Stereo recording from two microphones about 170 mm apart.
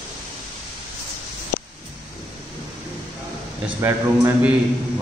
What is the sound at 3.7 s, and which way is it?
Speech, 15° right (ahead or behind).